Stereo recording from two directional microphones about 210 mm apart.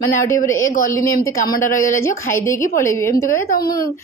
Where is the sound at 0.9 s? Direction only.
15° left (ahead or behind).